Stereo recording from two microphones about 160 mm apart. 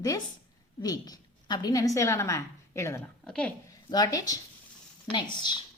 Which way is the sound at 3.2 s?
5° left (ahead or behind).